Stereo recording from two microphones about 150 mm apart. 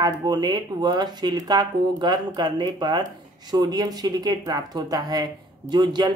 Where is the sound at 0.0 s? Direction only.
25° right (ahead or behind).